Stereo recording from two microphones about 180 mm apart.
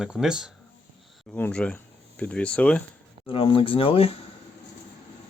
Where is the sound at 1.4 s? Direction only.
10° left (ahead or behind).